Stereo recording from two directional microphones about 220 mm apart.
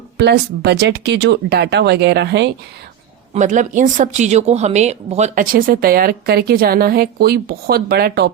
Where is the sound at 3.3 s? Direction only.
35° right (ahead or behind).